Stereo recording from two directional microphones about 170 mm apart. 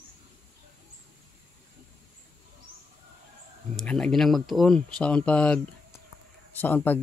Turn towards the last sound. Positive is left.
turn(degrees=10)  # may be behind; listen again after turning